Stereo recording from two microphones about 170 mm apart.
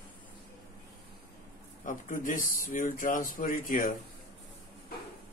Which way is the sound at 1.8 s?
50° left (ahead or behind).